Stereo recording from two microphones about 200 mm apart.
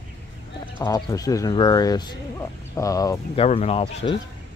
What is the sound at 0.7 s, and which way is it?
Speech, 15° left (ahead or behind).